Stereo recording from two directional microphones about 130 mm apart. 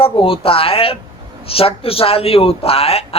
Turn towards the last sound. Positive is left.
turn(degrees=50)  # may be behind; listen again after turning